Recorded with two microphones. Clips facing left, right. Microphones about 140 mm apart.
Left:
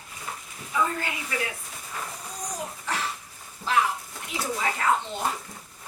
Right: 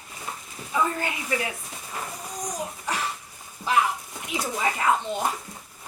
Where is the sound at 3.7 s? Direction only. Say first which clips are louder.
Right 1 dB; 15° right (ahead or behind).